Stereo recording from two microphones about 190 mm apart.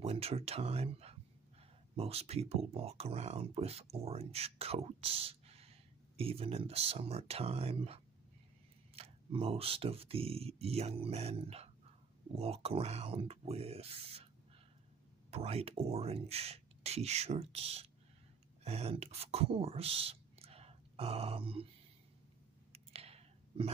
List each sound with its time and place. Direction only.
0.0 s speech: 30° right (ahead or behind)
15.3 s speech: 30° right (ahead or behind)
22.7 s clicking: 30° right (ahead or behind)